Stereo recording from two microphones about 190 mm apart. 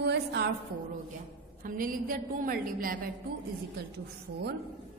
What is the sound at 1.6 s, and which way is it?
A woman's voice, 45° right (ahead or behind).